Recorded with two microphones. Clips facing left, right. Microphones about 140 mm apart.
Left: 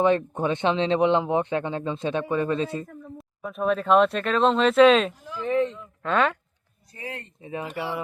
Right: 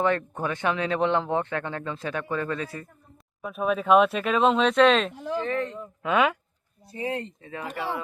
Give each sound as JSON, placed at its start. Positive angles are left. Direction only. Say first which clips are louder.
{"t": 0.0, "sound": "a man's voice", "louder": "left 4 dB", "side_deg": 20}
{"t": 2.8, "sound": "a sound", "louder": "left 11 dB", "side_deg": 90}
{"t": 3.4, "sound": "speech", "louder": "left 1 dB", "side_deg": -5}
{"t": 5.2, "sound": "speech", "louder": "right 6 dB", "side_deg": -65}
{"t": 5.5, "sound": "speech", "louder": "left 9 dB", "side_deg": 20}
{"t": 6.0, "sound": "speech", "louder": "even", "side_deg": -10}
{"t": 6.9, "sound": "speech", "louder": "right 7 dB", "side_deg": -25}
{"t": 7.4, "sound": "speech", "louder": "left 3 dB", "side_deg": 15}